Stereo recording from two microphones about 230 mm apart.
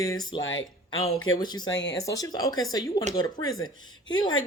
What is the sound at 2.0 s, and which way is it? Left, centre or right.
Speech, centre.